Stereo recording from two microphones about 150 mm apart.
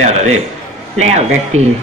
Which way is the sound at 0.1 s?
45° right (ahead or behind).